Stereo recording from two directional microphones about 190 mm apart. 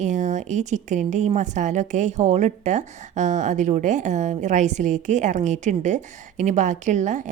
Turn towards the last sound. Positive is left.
turn(degrees=-40)  # may be behind; listen again after turning